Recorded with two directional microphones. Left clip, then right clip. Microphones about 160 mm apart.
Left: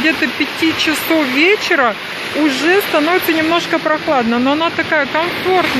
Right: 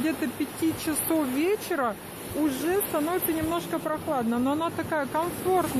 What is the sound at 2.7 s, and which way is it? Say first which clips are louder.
Speech: left 14 dB; 15° left (ahead or behind).